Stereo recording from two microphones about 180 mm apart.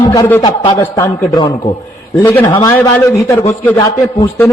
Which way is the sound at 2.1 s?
10° left (ahead or behind).